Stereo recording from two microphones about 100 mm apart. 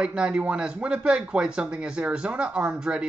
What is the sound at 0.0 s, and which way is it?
Speech, 10° right (ahead or behind).